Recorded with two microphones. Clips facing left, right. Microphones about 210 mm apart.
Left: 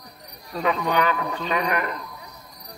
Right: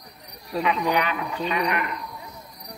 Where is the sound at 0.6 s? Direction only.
40° left (ahead or behind).